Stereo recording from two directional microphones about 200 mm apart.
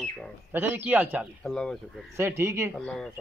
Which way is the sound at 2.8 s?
5° left (ahead or behind).